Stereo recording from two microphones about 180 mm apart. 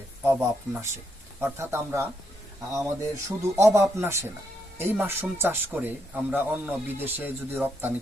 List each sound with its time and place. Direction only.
0.3 s a man's voice: 15° right (ahead or behind)